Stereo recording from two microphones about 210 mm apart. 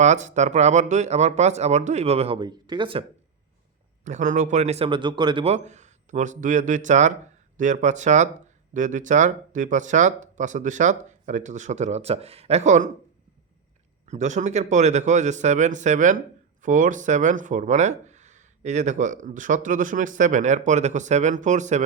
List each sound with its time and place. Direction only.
0.0 s speech: 35° right (ahead or behind)
4.0 s speech: 35° right (ahead or behind)
14.1 s speech: 35° right (ahead or behind)